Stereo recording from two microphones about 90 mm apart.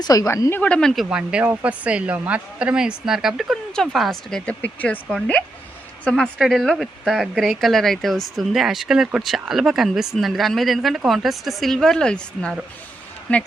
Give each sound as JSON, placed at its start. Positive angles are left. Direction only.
{"t": 0.0, "sound": "a woman's voice", "side_deg": 40}
{"t": 0.5, "sound": "speech", "side_deg": 15}
{"t": 1.1, "sound": "speech", "side_deg": -10}
{"t": 4.6, "sound": "speech", "side_deg": 15}